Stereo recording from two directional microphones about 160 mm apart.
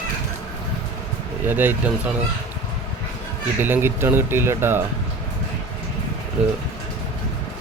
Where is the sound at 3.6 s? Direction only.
15° right (ahead or behind).